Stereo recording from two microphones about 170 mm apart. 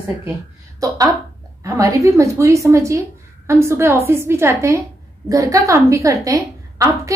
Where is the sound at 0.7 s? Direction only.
20° right (ahead or behind).